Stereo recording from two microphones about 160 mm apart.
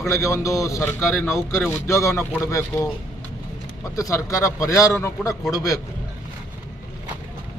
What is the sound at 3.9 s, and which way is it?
Speech, 20° left (ahead or behind).